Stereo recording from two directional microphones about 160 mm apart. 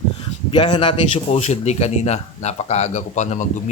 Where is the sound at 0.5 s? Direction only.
30° left (ahead or behind); by 3.6 s 50° left (ahead or behind).